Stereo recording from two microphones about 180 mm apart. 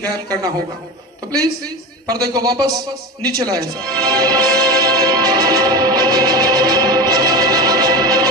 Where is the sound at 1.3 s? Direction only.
20° right (ahead or behind).